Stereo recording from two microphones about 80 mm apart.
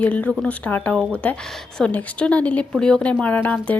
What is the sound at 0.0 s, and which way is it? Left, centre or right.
A woman's voice, centre.